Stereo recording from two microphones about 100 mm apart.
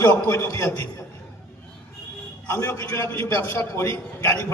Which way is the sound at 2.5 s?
30° left (ahead or behind).